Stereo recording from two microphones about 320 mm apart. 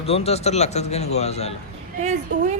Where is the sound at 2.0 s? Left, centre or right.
Right.